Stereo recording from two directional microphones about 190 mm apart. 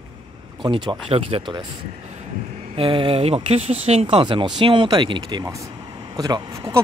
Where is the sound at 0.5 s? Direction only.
25° right (ahead or behind).